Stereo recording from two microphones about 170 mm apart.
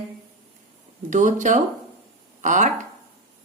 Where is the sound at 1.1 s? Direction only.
50° right (ahead or behind).